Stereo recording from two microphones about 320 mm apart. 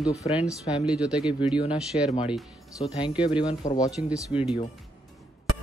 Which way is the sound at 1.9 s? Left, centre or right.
Centre.